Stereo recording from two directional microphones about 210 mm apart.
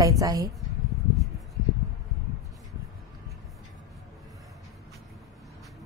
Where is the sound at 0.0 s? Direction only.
15° right (ahead or behind).